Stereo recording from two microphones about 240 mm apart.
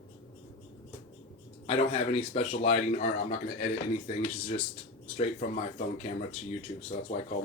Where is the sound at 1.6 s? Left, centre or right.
Left.